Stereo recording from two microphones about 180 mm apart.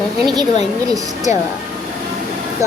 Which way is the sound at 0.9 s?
20° right (ahead or behind).